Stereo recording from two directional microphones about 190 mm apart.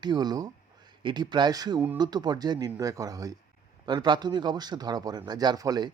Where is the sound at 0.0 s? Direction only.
20° right (ahead or behind).